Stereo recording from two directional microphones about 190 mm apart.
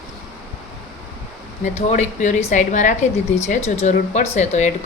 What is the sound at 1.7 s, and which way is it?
A woman's voice, 35° left (ahead or behind).